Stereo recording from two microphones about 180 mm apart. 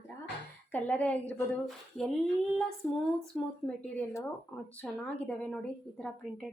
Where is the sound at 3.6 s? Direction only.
5° left (ahead or behind).